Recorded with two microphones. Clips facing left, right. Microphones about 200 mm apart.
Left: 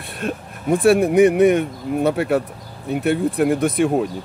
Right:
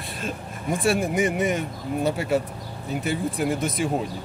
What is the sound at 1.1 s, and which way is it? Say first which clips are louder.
Speech: left 10 dB; 60° left (ahead or behind).